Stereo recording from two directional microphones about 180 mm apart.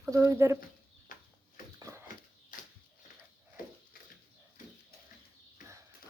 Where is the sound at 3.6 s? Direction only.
50° left (ahead or behind).